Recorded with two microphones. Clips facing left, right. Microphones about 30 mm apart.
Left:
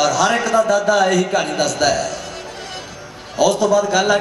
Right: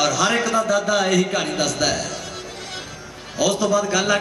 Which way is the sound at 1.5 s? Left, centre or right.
Centre.